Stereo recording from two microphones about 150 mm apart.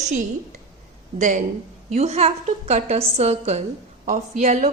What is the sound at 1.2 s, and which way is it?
Speech, 60° right (ahead or behind).